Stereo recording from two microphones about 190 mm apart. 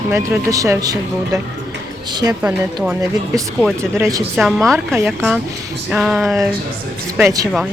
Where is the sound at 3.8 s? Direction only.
15° right (ahead or behind).